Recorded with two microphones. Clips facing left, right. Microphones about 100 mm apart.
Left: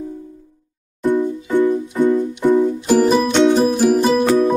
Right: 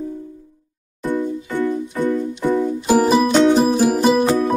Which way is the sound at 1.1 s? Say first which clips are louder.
Left 4 dB; 20° left (ahead or behind).